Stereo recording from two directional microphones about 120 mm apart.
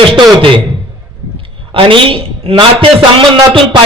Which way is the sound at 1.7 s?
45° right (ahead or behind).